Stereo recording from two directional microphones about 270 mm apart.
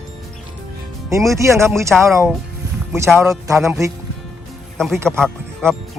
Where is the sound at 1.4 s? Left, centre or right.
Centre.